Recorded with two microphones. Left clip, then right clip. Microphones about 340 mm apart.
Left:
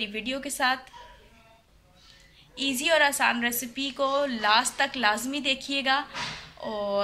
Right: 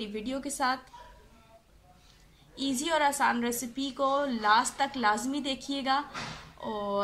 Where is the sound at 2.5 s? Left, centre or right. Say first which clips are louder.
Left 6 dB; centre.